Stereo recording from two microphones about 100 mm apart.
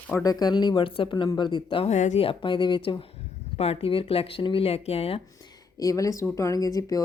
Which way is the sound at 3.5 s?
85° left.